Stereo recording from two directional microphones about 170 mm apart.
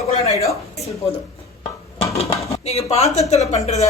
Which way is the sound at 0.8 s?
35° left (ahead or behind).